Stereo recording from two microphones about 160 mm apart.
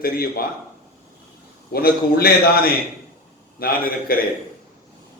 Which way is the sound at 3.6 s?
65° left (ahead or behind).